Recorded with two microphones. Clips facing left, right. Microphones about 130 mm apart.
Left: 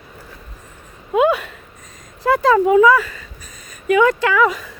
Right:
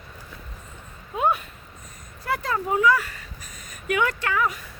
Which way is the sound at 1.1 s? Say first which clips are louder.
Left 8 dB; 90° left.